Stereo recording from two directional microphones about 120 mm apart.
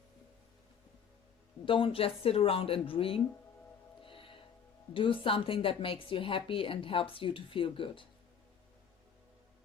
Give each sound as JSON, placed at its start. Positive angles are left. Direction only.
{"t": 1.6, "sound": "a woman's voice", "side_deg": 45}
{"t": 4.0, "sound": "music", "side_deg": 45}
{"t": 4.9, "sound": "a woman's voice", "side_deg": 45}